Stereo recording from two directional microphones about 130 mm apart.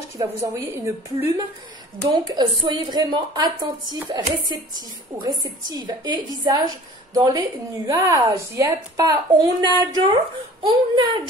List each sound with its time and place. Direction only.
0.2 s speech: 25° right (ahead or behind)
2.1 s a woman's voice: 35° right (ahead or behind)